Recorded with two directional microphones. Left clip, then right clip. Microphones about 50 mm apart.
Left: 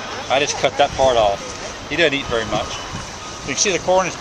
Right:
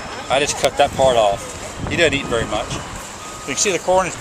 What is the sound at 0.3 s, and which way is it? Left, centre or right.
Speech, right.